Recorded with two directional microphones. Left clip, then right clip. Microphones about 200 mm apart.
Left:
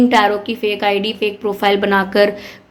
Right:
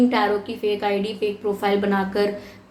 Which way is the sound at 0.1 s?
45° left (ahead or behind).